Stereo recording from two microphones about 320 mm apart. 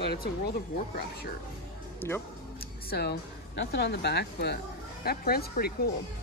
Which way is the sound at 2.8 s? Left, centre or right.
Left.